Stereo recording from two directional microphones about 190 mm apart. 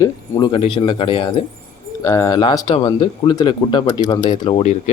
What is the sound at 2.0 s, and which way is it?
Speech, 15° left (ahead or behind).